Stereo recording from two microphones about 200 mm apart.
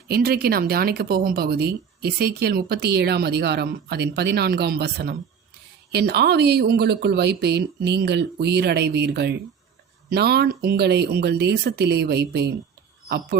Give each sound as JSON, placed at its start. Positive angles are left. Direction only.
{"t": 0.1, "sound": "speech", "side_deg": -50}